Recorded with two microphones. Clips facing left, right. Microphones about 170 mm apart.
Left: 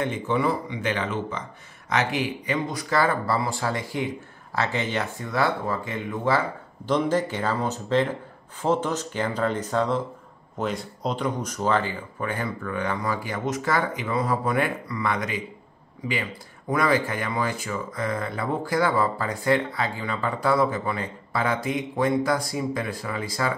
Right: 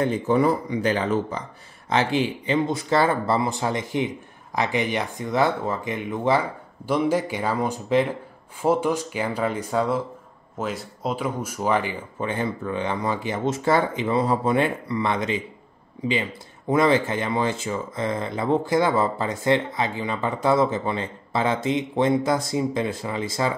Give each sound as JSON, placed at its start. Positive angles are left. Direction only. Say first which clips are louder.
{"t": 0.0, "sound": "speech", "louder": "right 4 dB", "side_deg": -40}
{"t": 16.7, "sound": "speech", "louder": "right 3 dB", "side_deg": -25}